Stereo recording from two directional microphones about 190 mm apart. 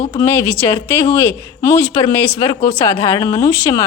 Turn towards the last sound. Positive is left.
turn(degrees=15)  # may be behind; listen again after turning